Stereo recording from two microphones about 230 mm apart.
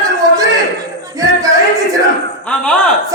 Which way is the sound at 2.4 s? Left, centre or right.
Centre.